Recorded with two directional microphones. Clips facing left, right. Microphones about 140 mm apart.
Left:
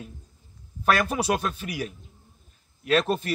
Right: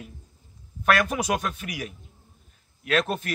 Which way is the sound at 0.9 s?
30° left (ahead or behind).